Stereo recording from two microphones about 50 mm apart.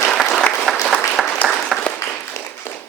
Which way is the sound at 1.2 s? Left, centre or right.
Centre.